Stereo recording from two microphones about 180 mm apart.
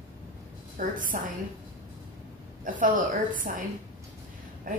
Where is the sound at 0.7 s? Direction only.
50° right (ahead or behind).